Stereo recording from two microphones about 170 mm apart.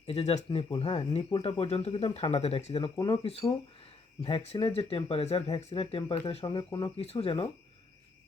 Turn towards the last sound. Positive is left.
turn(degrees=35)  # may be behind; listen again after turning